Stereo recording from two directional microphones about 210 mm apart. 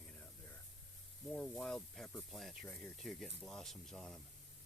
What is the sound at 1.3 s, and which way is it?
Speech, 5° left (ahead or behind).